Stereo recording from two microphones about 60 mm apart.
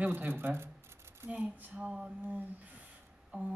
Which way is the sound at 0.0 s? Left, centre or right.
Right.